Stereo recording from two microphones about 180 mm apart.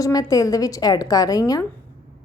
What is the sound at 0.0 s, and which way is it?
A woman's voice, 20° left (ahead or behind).